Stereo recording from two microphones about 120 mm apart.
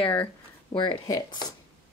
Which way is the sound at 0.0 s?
45° left (ahead or behind).